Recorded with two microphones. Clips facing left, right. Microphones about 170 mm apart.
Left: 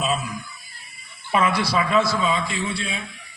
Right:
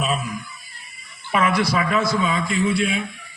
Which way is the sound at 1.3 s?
30° left (ahead or behind).